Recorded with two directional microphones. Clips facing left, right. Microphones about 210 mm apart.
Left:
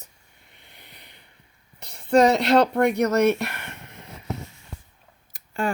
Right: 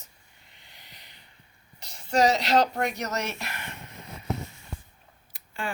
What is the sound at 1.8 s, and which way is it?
Speech, 55° left (ahead or behind).